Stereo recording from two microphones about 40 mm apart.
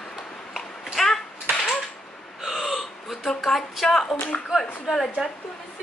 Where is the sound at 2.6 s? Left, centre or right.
Centre.